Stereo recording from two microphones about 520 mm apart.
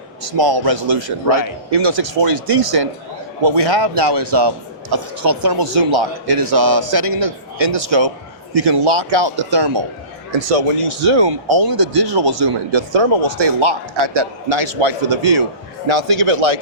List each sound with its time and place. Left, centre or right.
0.3 s a man's voice: right
10.3 s speech: right
11.3 s a man's voice: right
12.9 s speech: right
13.9 s speech: right
15.9 s speech: right